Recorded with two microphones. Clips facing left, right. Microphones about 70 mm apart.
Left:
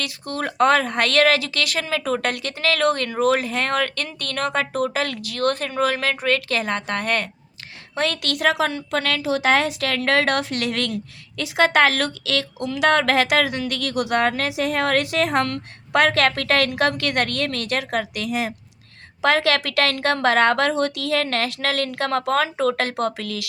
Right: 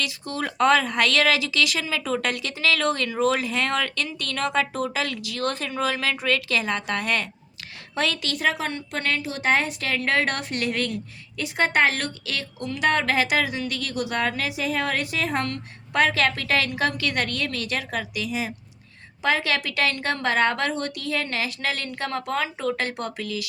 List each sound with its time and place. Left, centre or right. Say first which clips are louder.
0.0 s speech: left 2 dB; left
8.2 s a woman's voice: left 5 dB; left
19.2 s a woman's voice: left 5 dB; left